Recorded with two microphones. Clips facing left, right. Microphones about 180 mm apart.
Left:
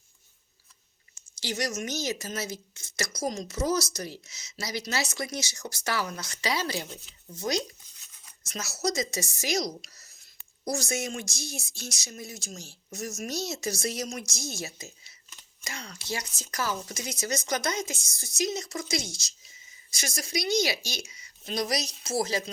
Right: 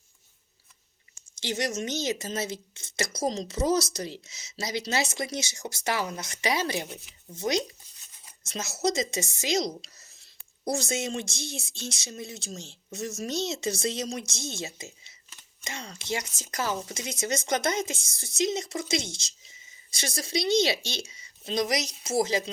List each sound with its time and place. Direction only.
1.1 s a woman's voice: 25° right (ahead or behind)